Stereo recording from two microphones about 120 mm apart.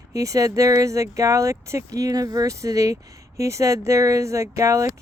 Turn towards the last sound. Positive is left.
turn(degrees=-25)  # may be behind; listen again after turning